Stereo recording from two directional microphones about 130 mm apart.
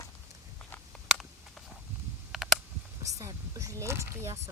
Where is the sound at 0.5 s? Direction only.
5° left (ahead or behind).